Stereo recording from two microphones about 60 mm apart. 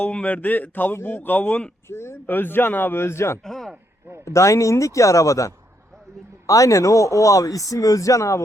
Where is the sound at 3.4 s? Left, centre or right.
Centre.